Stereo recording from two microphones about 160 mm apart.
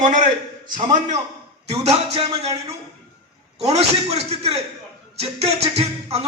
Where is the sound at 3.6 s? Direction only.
40° right (ahead or behind).